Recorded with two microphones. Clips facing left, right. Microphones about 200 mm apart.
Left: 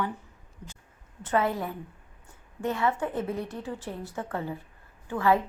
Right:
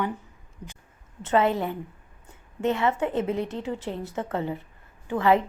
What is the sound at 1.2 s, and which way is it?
A woman's voice, 25° right (ahead or behind).